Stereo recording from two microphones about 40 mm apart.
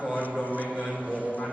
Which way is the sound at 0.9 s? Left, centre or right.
Right.